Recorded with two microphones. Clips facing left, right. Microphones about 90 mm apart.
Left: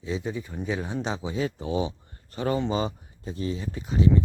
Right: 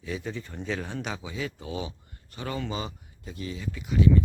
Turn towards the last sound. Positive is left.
turn(degrees=30)  # may be behind; listen again after turning